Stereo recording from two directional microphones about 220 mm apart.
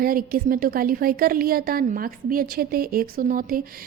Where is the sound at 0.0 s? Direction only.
40° right (ahead or behind).